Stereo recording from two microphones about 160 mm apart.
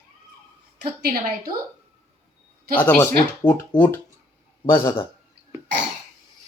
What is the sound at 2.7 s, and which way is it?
Speech, 10° left (ahead or behind).